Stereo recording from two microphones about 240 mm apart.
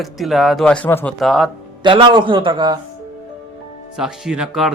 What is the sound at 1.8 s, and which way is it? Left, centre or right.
A man's voice, centre.